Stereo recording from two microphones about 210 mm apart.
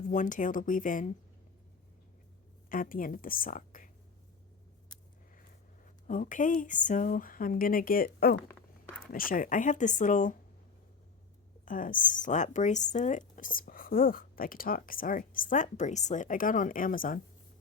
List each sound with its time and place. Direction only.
0.1 s speech: 35° left (ahead or behind)
2.6 s speech: 40° left (ahead or behind)
5.8 s speech: 40° left (ahead or behind)
11.6 s speech: 40° left (ahead or behind)